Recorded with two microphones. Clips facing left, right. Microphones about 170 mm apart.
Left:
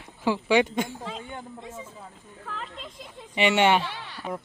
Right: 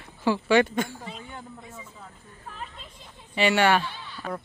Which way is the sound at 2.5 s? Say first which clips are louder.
Left 3 dB; 90° left.